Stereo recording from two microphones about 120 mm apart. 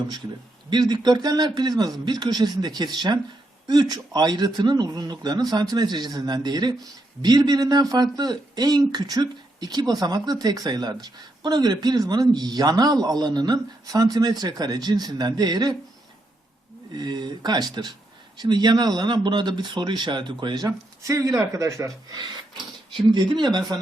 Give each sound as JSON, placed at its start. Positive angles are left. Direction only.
{"t": 0.7, "sound": "speech", "side_deg": -35}
{"t": 16.9, "sound": "speech", "side_deg": -35}